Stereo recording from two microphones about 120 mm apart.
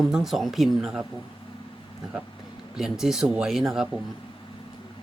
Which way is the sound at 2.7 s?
5° right (ahead or behind).